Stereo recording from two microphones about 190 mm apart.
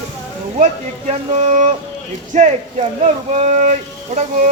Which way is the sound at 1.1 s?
35° right (ahead or behind).